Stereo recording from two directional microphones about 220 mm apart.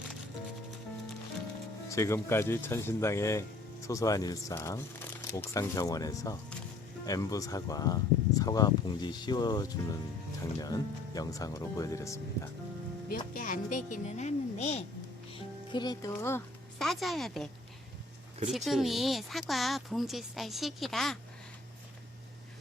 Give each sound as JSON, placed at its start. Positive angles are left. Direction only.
{"t": 1.9, "sound": "speech", "side_deg": 15}
{"t": 13.3, "sound": "speech", "side_deg": 35}
{"t": 15.4, "sound": "music", "side_deg": 20}
{"t": 16.8, "sound": "speech", "side_deg": 0}
{"t": 18.5, "sound": "speech", "side_deg": 0}